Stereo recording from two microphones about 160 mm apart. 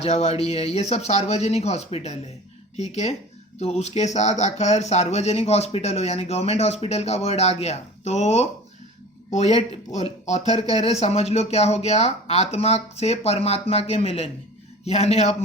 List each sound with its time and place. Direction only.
0.0 s speech: 40° left (ahead or behind)